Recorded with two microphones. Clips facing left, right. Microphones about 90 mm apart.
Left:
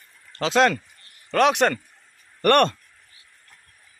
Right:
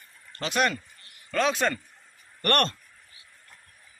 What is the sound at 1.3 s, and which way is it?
Speech, 70° left (ahead or behind).